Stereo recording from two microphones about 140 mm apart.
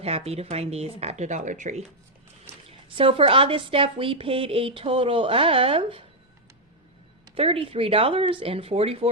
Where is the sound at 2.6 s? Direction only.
40° right (ahead or behind).